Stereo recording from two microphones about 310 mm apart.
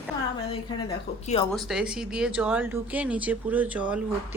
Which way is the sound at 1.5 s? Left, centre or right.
Centre.